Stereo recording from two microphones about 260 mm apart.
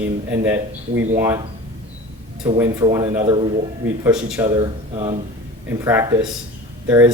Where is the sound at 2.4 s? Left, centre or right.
Centre.